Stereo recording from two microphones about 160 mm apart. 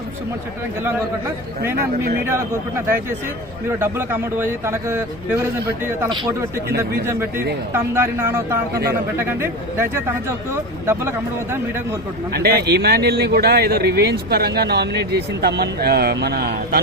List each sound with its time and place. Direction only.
3.7 s speech: 15° right (ahead or behind)
6.7 s a man's voice: 80° right
7.0 s speech: 15° right (ahead or behind)
8.7 s a man's voice: 80° right
9.1 s speech: 15° right (ahead or behind)
12.3 s a man's voice: 80° right